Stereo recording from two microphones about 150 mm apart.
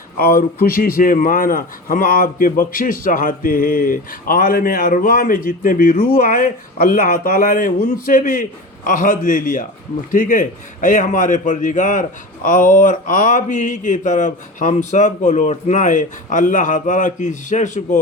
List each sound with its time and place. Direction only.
0.2 s a man's voice: 75° left (ahead or behind); by 18.0 s 55° left (ahead or behind)